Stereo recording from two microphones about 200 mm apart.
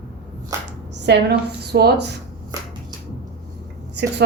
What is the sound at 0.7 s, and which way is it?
Speech, 60° right (ahead or behind).